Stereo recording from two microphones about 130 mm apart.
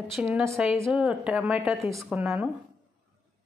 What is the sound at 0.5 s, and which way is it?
Speech, centre (ahead or behind).